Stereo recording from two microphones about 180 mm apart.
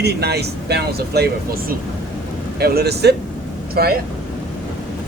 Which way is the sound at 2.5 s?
60° right (ahead or behind).